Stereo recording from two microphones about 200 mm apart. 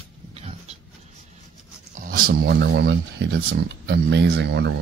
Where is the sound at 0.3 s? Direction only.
30° right (ahead or behind).